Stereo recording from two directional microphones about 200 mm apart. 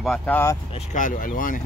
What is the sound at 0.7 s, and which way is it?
Speech, 40° left (ahead or behind).